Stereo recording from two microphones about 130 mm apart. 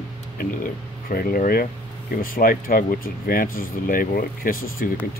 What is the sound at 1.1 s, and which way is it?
Speech, 90° left.